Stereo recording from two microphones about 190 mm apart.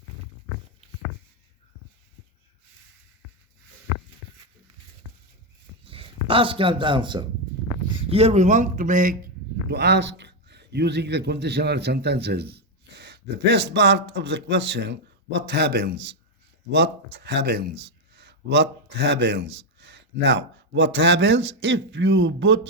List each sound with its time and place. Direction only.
5.8 s speech: 30° right (ahead or behind); by 9.1 s 45° right (ahead or behind)
9.6 s a man's voice: 60° right (ahead or behind)